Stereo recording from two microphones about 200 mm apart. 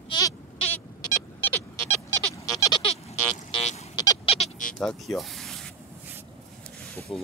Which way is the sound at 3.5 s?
30° left (ahead or behind).